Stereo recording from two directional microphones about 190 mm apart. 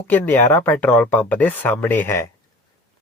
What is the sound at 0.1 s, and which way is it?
Speech, 10° left (ahead or behind).